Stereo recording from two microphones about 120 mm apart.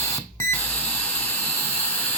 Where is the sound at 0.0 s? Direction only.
20° left (ahead or behind).